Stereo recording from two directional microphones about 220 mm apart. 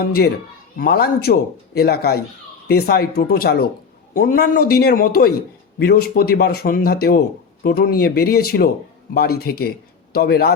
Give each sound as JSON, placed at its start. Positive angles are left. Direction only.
{"t": 0.0, "sound": "speech", "side_deg": 45}